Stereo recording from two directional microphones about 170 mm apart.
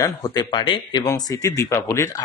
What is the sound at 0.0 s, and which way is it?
A man's voice, 25° left (ahead or behind).